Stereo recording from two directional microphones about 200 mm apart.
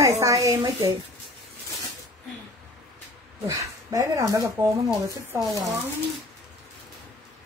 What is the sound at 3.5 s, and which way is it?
A woman's voice, 15° right (ahead or behind).